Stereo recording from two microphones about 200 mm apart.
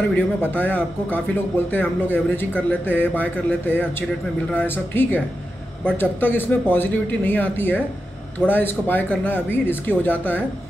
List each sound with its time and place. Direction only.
0.1 s speech: 10° left (ahead or behind)